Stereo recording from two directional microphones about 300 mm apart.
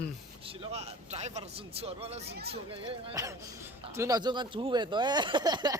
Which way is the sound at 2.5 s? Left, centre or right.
Centre.